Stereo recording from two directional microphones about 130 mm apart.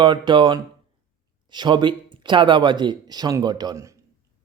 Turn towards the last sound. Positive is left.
turn(degrees=-25)  # may be behind; listen again after turning